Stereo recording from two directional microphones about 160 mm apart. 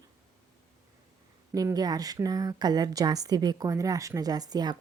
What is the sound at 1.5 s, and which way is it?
A woman's voice, 25° right (ahead or behind).